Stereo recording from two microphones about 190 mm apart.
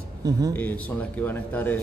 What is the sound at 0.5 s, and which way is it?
A man's voice, 10° left (ahead or behind).